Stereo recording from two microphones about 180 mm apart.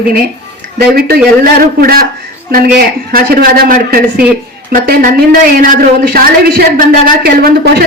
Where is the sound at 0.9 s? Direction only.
55° right (ahead or behind).